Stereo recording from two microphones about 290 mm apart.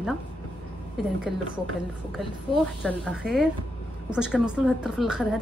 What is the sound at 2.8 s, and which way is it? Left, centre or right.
A woman's voice, centre.